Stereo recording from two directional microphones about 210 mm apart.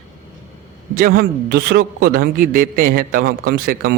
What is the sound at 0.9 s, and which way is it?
A man's voice, 45° right (ahead or behind).